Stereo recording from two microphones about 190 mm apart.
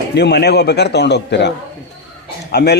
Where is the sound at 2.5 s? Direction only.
60° left (ahead or behind).